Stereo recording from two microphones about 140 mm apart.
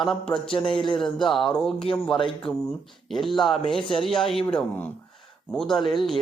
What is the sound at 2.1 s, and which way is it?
Speech, 35° left (ahead or behind).